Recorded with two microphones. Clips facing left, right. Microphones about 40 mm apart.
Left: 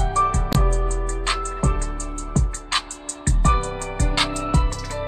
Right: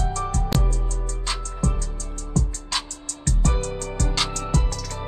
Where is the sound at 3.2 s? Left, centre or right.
Left.